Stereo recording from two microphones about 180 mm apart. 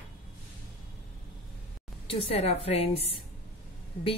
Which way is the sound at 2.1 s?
35° left (ahead or behind).